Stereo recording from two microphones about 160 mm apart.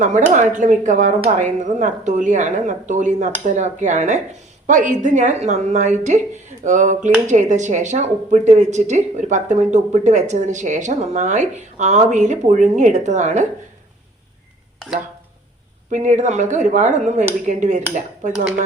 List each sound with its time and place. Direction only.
0.0 s speech: 45° right (ahead or behind)
15.9 s speech: 50° right (ahead or behind)